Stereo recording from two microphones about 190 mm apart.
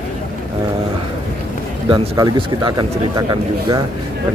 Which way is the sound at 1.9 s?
25° right (ahead or behind).